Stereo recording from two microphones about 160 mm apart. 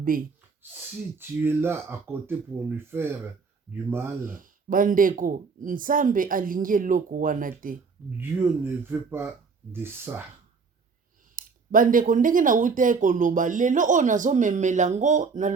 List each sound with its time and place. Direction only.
1.2 s speech: 15° right (ahead or behind)
4.2 s speech: 60° right (ahead or behind)
8.2 s speech: 15° right (ahead or behind)
11.3 s speech: 60° right (ahead or behind)